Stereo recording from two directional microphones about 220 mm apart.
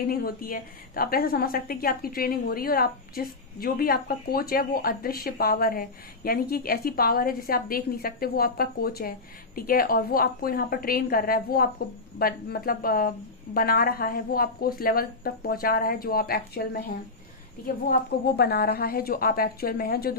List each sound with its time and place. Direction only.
0.1 s a woman's voice: 40° left (ahead or behind)